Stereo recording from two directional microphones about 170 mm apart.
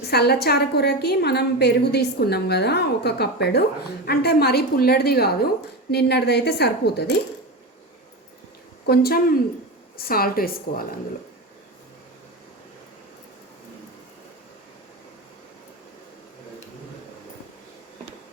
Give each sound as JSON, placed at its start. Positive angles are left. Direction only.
{"t": 0.0, "sound": "a woman's voice", "side_deg": 70}
{"t": 8.9, "sound": "a woman's voice", "side_deg": 65}